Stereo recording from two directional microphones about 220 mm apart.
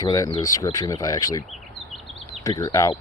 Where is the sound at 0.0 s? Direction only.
15° left (ahead or behind).